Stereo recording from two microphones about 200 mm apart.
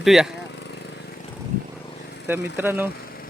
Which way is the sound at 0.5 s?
60° left (ahead or behind).